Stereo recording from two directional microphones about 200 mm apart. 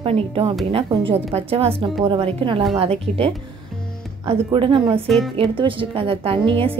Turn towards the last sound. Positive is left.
turn(degrees=-25)  # may be behind; listen again after turning